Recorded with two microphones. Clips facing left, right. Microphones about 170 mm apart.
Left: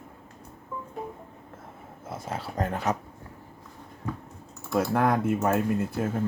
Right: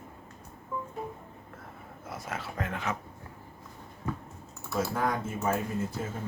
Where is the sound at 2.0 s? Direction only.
30° left (ahead or behind).